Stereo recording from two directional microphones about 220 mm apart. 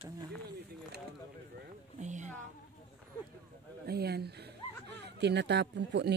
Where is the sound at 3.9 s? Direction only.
45° right (ahead or behind).